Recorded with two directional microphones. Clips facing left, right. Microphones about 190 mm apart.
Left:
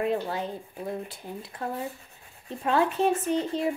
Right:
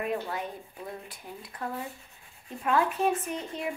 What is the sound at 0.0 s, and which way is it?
Speech, 30° left (ahead or behind).